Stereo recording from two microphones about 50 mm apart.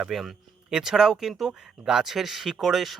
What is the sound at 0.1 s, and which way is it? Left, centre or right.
Speech, centre.